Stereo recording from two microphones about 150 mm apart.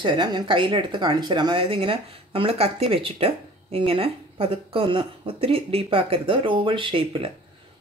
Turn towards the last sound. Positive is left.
turn(degrees=-35)  # may be behind; listen again after turning